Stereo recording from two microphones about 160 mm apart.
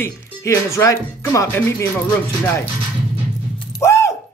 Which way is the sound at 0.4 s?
20° left (ahead or behind).